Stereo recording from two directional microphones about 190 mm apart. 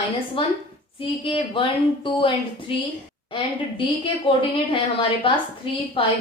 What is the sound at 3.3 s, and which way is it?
A woman's voice, 25° left (ahead or behind).